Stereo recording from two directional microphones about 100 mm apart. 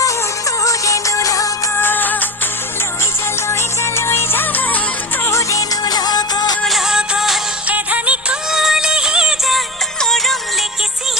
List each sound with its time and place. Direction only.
0.6 s music: 35° left (ahead or behind)
1.7 s music of bollywood: 20° left (ahead or behind)
3.5 s music: 25° left (ahead or behind)
5.2 s music: 30° left (ahead or behind)
6.6 s music: centre (ahead or behind)
7.7 s music: 15° right (ahead or behind); by 10.7 s 5° left (ahead or behind)